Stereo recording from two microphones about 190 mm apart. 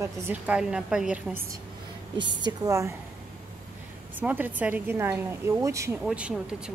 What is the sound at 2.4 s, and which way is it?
Speech, 20° right (ahead or behind).